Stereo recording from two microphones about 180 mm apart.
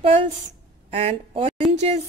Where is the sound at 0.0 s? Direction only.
35° right (ahead or behind).